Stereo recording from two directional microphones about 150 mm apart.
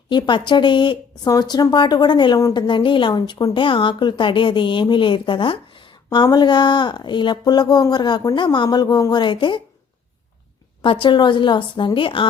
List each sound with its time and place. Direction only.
0.1 s a woman's voice: 30° left (ahead or behind)
11.0 s a woman's voice: 30° left (ahead or behind)